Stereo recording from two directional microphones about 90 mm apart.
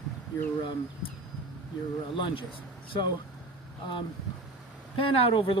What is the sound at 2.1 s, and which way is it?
Speech, 60° left (ahead or behind).